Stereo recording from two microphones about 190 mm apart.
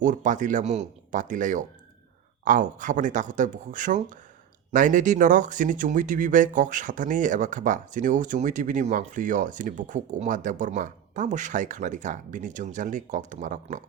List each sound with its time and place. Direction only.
0.0 s speech: 40° right (ahead or behind)